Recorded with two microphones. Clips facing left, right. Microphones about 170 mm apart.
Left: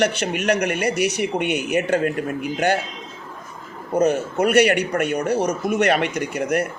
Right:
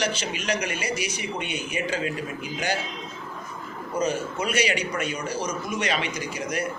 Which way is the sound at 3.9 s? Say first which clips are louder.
Left 7 dB; 60° left (ahead or behind).